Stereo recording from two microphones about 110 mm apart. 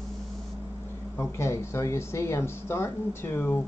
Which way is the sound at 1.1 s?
25° left (ahead or behind).